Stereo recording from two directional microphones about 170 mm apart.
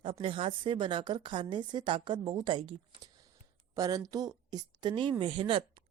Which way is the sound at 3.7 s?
20° right (ahead or behind).